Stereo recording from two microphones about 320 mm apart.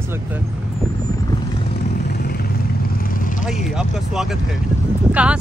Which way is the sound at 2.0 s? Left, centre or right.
Left.